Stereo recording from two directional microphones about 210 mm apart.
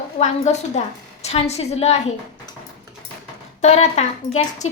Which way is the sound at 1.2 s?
30° left (ahead or behind).